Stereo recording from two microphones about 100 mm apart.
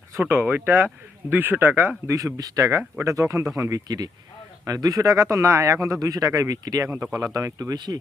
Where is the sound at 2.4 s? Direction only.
35° right (ahead or behind).